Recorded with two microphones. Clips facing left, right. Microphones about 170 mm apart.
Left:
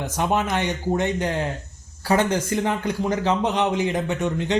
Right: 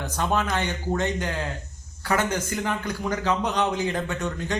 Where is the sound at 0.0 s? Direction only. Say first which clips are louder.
Left 3 dB; 20° left (ahead or behind).